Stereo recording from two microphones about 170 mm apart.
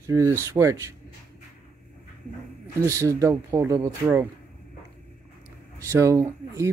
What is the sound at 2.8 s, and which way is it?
Speech, 15° right (ahead or behind).